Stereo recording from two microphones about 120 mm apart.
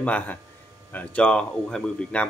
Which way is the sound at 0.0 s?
10° left (ahead or behind).